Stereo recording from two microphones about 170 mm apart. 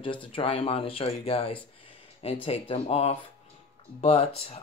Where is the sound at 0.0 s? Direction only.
30° left (ahead or behind).